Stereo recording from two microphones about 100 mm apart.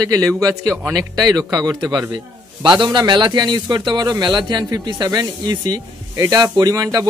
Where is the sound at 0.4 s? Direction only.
35° right (ahead or behind).